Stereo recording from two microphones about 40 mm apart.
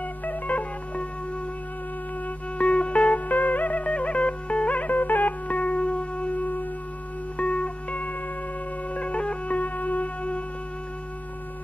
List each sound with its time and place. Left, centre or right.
0.2 s music: left
2.2 s music: left
7.3 s music: left
9.6 s music: left